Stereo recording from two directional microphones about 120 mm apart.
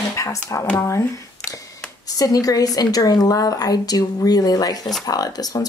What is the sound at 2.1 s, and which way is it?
A woman's voice, 30° left (ahead or behind).